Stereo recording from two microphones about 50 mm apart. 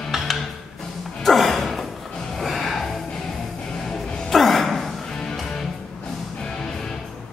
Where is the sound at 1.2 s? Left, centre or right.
Centre.